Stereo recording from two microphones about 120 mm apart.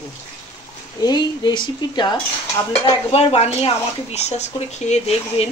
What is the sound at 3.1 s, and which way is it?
Speech, 55° left (ahead or behind).